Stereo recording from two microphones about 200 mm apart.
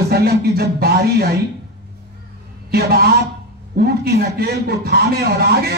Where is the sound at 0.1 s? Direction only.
50° right (ahead or behind).